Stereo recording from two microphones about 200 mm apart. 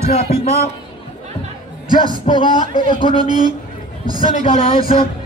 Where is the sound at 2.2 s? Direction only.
20° left (ahead or behind).